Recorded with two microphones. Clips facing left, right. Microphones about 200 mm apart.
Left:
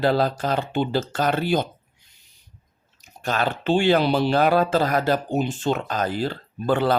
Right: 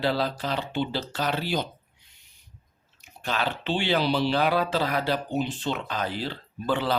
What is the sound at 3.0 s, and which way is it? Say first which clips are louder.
Speech: left 4 dB; 45° left (ahead or behind).